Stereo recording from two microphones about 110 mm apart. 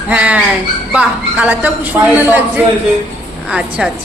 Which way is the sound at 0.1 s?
15° right (ahead or behind).